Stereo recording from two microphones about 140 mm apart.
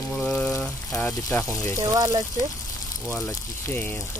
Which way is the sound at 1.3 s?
20° left (ahead or behind).